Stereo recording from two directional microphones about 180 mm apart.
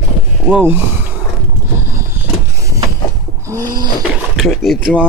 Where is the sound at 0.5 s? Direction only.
10° right (ahead or behind).